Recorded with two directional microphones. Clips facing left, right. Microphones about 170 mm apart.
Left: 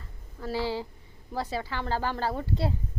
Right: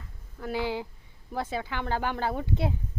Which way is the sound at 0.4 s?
15° right (ahead or behind).